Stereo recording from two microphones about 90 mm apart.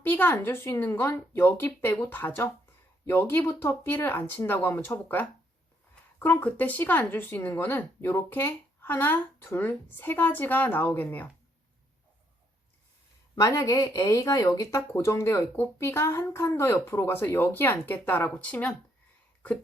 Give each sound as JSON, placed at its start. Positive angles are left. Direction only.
{"t": 0.0, "sound": "speech", "side_deg": 20}
{"t": 13.3, "sound": "speech", "side_deg": 40}